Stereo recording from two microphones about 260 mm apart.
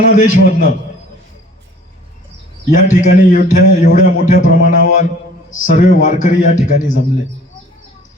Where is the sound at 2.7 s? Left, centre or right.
Left.